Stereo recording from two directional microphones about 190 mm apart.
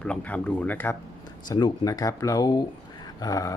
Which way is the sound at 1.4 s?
20° left (ahead or behind).